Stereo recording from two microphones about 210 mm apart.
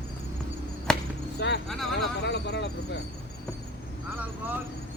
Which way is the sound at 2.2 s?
55° left (ahead or behind).